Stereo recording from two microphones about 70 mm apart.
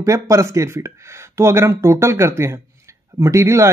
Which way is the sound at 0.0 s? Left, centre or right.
Right.